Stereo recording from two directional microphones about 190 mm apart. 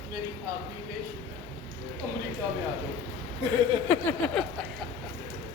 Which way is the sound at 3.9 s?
10° left (ahead or behind).